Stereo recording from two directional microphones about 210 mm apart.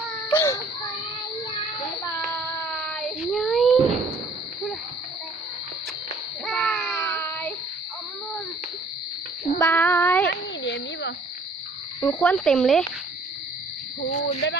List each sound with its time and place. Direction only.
0.3 s baby cry: 15° left (ahead or behind)
2.6 s child singing: 5° left (ahead or behind)
6.4 s child singing: 5° left (ahead or behind)
9.6 s child singing: 10° left (ahead or behind)
10.2 s a sound: 55° left (ahead or behind)
11.9 s speech: 10° left (ahead or behind)
14.0 s owl: 40° left (ahead or behind)